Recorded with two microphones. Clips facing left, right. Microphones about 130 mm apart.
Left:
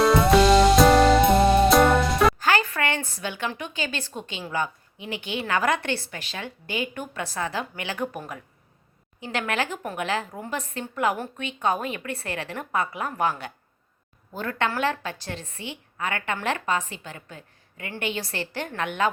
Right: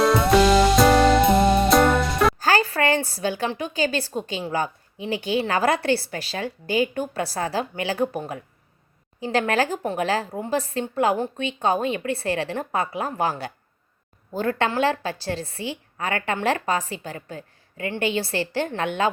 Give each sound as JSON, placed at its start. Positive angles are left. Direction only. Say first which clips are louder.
{"t": 0.0, "sound": "music", "louder": "even", "side_deg": 0}
{"t": 2.4, "sound": "a sound", "louder": "right 3 dB", "side_deg": -35}
{"t": 3.5, "sound": "a woman's voice", "louder": "right 7 dB", "side_deg": -35}